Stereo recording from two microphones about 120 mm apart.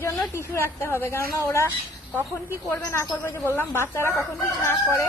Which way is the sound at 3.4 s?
20° left (ahead or behind).